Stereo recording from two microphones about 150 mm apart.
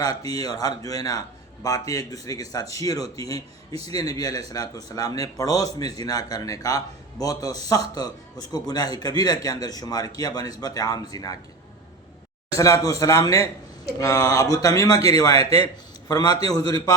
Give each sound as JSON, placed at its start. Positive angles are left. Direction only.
{"t": 0.0, "sound": "a man's voice", "side_deg": 25}
{"t": 12.5, "sound": "a man's voice", "side_deg": 20}